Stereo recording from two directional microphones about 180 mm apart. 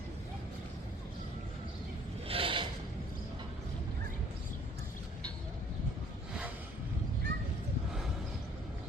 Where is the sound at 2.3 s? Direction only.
30° right (ahead or behind).